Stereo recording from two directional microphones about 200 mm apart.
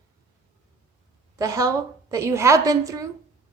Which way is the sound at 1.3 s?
15° right (ahead or behind).